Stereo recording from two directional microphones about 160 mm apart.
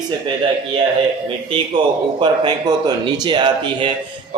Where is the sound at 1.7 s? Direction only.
30° right (ahead or behind).